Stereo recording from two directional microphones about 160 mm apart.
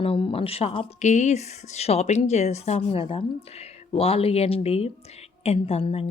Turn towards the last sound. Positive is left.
turn(degrees=40)  # may be behind; listen again after turning